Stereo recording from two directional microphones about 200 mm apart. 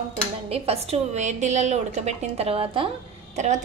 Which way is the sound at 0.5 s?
30° right (ahead or behind).